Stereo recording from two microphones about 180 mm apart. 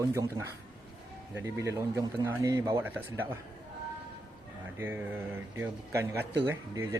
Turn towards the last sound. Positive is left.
turn(degrees=-15)  # may be behind; listen again after turning